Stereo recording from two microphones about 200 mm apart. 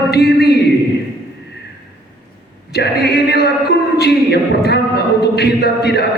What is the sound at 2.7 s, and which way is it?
Speech, 55° left (ahead or behind).